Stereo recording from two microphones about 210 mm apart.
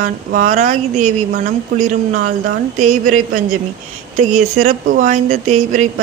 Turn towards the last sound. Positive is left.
turn(degrees=-35)  # may be behind; listen again after turning